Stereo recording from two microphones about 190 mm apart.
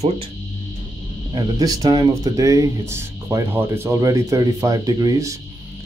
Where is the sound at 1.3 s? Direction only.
20° right (ahead or behind).